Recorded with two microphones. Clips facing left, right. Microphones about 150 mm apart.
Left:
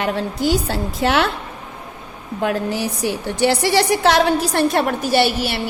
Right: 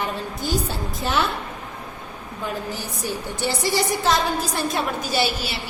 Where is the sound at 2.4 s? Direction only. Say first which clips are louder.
Left 9 dB; 75° left (ahead or behind).